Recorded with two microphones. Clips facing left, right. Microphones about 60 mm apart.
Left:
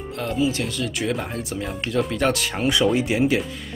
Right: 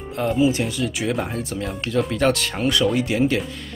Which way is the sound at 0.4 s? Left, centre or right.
Centre.